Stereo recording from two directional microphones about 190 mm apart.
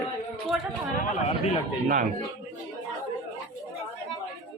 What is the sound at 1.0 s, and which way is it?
Speech, 35° left (ahead or behind).